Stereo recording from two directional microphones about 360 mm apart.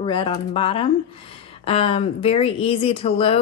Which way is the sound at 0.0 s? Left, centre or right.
Centre.